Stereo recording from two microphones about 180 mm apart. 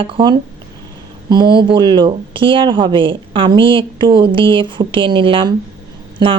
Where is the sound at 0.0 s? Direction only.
25° right (ahead or behind).